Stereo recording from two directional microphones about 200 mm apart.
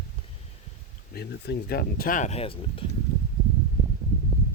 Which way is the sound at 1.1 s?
55° left (ahead or behind).